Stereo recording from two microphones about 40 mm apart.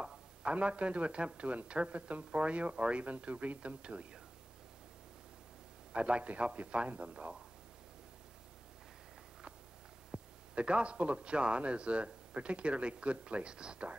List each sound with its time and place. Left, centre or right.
0.4 s a man's voice: right
5.9 s speech: right
10.1 s a sound: right
10.5 s a man's voice: right